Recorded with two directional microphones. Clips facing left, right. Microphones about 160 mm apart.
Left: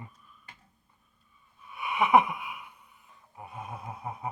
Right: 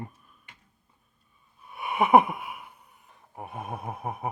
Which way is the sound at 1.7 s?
45° right (ahead or behind).